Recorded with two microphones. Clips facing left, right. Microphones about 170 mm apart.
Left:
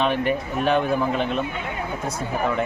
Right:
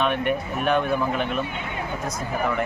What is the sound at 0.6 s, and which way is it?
Speech, 30° left (ahead or behind).